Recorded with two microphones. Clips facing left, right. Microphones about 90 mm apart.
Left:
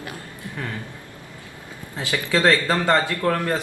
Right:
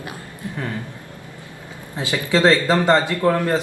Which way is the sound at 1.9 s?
20° right (ahead or behind).